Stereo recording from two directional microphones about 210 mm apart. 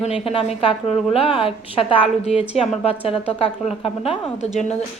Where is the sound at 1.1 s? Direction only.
25° left (ahead or behind).